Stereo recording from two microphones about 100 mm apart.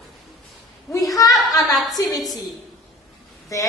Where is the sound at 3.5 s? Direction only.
35° left (ahead or behind).